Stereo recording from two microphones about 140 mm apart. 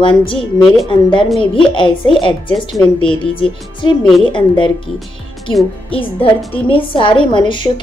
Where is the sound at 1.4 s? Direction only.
40° left (ahead or behind).